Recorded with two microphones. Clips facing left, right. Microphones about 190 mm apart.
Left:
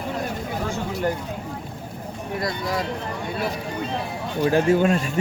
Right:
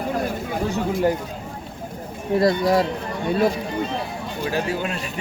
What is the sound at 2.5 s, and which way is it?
Speech, 40° right (ahead or behind).